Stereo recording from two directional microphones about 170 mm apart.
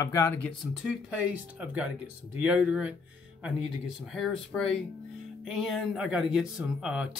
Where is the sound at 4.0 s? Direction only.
Centre (ahead or behind).